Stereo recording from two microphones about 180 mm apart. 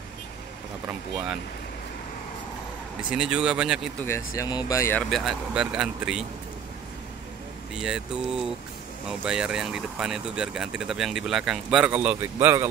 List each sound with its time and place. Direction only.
3.1 s speech: 5° right (ahead or behind)
4.4 s speech: 20° left (ahead or behind)
5.1 s speech: centre (ahead or behind)
7.7 s speech: 5° right (ahead or behind)